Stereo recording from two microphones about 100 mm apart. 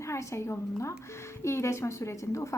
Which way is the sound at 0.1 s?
30° left (ahead or behind).